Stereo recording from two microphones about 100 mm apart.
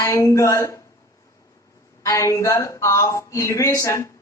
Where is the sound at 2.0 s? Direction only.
35° left (ahead or behind).